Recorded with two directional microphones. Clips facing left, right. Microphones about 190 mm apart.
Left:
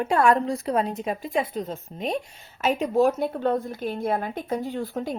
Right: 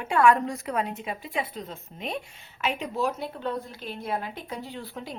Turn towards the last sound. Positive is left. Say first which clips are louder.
# left 9 dB
turn(degrees=50)  # may be behind; listen again after turning